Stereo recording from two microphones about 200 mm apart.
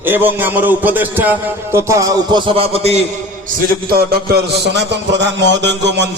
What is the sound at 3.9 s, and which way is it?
A man's voice, 50° right (ahead or behind).